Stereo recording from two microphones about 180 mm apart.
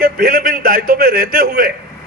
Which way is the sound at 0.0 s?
55° right (ahead or behind).